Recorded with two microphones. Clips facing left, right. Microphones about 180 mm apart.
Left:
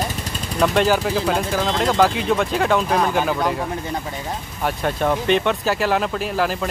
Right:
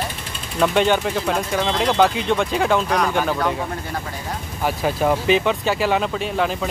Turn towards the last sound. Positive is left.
turn(degrees=0)  # may be behind; listen again after turning